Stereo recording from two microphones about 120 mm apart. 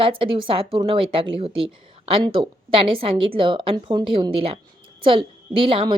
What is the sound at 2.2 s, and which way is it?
Speech, 35° right (ahead or behind).